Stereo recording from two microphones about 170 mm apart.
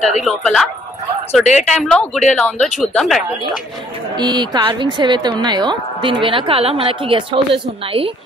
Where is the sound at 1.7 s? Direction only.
5° left (ahead or behind).